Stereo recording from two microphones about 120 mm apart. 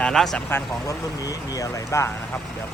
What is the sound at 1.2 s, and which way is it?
Speech, 30° left (ahead or behind).